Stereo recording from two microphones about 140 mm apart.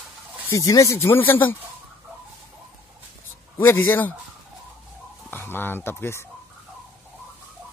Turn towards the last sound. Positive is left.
turn(degrees=15)  # may be behind; listen again after turning